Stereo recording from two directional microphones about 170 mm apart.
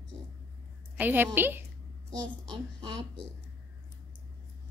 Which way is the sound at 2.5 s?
25° right (ahead or behind).